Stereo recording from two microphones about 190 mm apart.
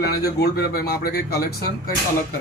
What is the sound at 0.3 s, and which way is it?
Speech, 55° left (ahead or behind).